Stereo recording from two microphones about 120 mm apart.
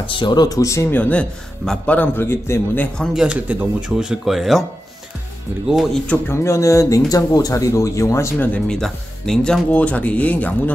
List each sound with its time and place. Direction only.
0.0 s speech: 45° left (ahead or behind); by 0.8 s 25° left (ahead or behind)
0.8 s speech: 15° left (ahead or behind)
3.2 s speech: 10° right (ahead or behind)
6.0 s speech: 20° left (ahead or behind)
8.5 s speech: 5° left (ahead or behind)